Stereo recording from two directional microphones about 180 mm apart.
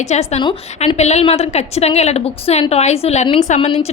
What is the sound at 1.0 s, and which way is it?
A woman's voice, 35° left (ahead or behind).